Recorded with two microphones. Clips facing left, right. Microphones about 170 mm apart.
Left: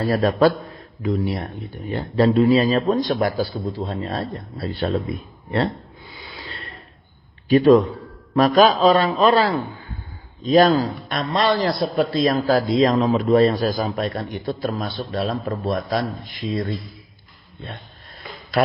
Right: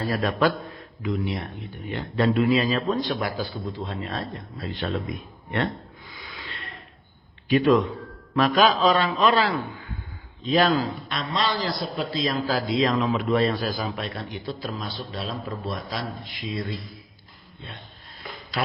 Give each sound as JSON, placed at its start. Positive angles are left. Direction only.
{"t": 0.1, "sound": "a man's voice", "side_deg": 40}
{"t": 4.8, "sound": "a sound", "side_deg": 30}
{"t": 7.5, "sound": "a man's voice", "side_deg": 35}